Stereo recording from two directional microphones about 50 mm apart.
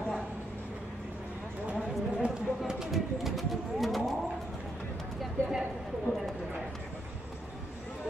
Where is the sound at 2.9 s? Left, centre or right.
Centre.